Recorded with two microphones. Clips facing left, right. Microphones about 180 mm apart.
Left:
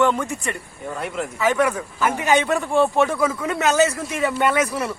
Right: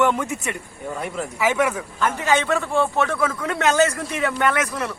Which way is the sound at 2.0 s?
15° left (ahead or behind).